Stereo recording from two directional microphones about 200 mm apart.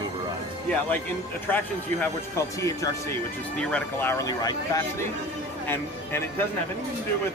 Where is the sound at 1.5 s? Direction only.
10° left (ahead or behind).